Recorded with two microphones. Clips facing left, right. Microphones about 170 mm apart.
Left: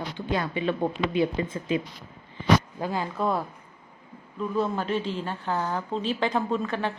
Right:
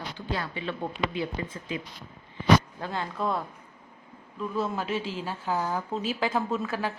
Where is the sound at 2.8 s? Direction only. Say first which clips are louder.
Left 3 dB; 5° left (ahead or behind).